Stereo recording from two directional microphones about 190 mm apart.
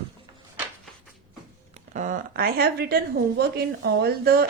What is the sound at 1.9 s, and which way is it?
A woman's voice, 45° right (ahead or behind).